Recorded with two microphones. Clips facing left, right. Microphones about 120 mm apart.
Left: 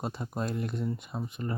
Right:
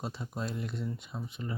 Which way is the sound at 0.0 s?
50° left (ahead or behind).